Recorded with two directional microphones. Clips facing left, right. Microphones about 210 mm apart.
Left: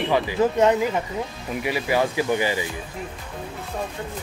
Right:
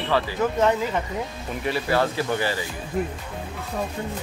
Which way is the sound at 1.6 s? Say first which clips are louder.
Even; 10° left (ahead or behind).